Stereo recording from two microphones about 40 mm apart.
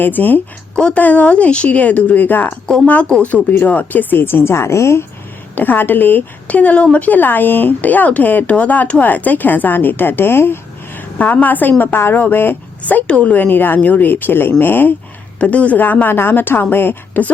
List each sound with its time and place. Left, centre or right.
0.0 s a woman's voice: left
0.9 s speech: left
2.2 s speech: left
2.8 s a woman's voice: left
5.5 s speech: left
6.5 s speech: left
8.4 s a woman's voice: left
10.9 s a woman's voice: left
11.9 s a woman's voice: left
12.8 s a woman's voice: left
13.3 s a woman's voice: left
13.8 s a woman's voice: left
15.4 s speech: left
15.8 s a woman's voice: left